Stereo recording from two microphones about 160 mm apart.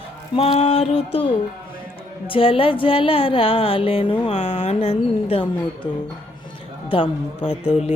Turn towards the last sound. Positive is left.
turn(degrees=35)  # may be behind; listen again after turning